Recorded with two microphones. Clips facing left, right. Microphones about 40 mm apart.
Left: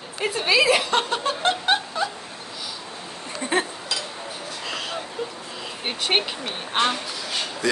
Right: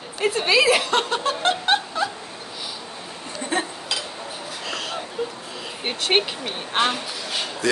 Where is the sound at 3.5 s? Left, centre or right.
Left.